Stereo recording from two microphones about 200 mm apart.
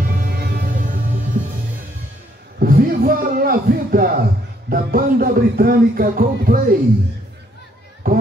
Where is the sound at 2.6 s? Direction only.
45° right (ahead or behind).